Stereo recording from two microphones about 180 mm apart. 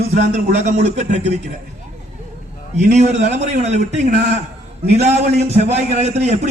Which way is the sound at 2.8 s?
40° right (ahead or behind).